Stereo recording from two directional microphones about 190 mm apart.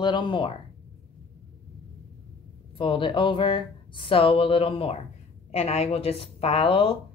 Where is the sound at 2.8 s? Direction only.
25° left (ahead or behind).